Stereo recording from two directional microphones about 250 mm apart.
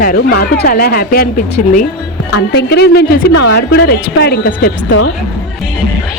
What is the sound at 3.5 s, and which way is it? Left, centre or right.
Speech, left.